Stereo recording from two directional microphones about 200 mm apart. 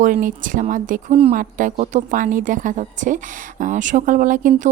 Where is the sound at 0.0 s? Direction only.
40° right (ahead or behind).